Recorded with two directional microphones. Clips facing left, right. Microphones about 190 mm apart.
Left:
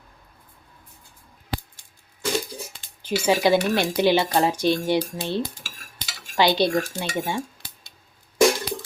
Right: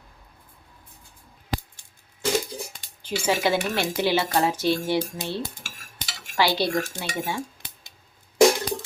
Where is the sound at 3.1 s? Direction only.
10° left (ahead or behind).